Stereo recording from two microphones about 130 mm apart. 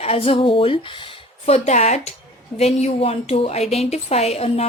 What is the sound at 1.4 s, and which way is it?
Speech, 55° left (ahead or behind).